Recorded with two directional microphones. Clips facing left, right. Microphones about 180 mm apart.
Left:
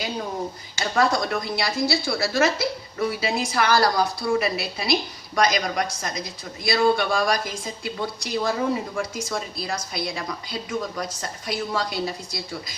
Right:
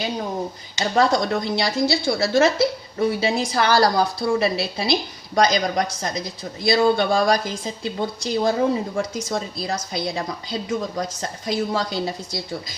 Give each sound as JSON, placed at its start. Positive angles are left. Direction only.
{"t": 0.8, "sound": "speech", "side_deg": -25}